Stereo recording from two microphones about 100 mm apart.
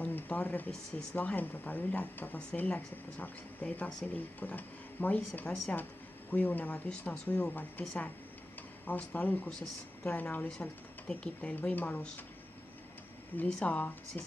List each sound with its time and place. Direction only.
0.0 s speech: 15° left (ahead or behind)
8.8 s speech: 15° left (ahead or behind)
13.4 s speech: 15° left (ahead or behind)